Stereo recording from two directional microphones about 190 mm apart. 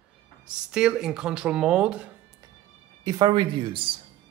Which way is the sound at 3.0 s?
20° right (ahead or behind).